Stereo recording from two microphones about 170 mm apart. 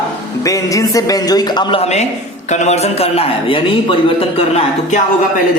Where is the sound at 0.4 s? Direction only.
20° left (ahead or behind); by 4.9 s 35° left (ahead or behind).